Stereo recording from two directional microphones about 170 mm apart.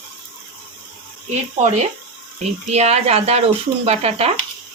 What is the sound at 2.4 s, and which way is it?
Speech, 40° right (ahead or behind).